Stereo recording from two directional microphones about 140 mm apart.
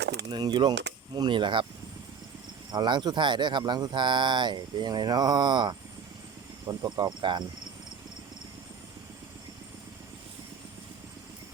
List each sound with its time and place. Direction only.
0.3 s speech: 30° right (ahead or behind)
2.7 s speech: 30° right (ahead or behind)